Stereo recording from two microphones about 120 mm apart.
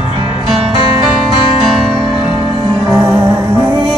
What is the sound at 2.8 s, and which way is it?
Music, 25° right (ahead or behind).